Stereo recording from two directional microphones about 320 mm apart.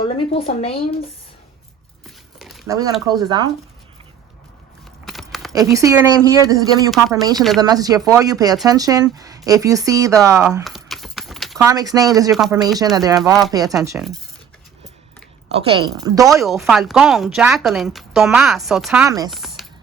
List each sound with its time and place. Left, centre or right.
0.0 s a woman's voice: centre
2.0 s a sound: centre
2.7 s speech: centre
5.0 s a sound: centre
5.6 s speech: centre
10.6 s keys jangling: centre
11.7 s a woman's voice: centre
13.5 s a woman's voice: centre
15.5 s a woman's voice: centre
19.3 s a sound: centre